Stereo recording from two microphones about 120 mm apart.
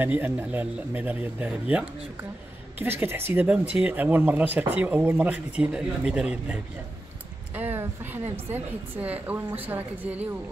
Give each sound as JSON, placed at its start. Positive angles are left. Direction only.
{"t": 0.0, "sound": "speech", "side_deg": -15}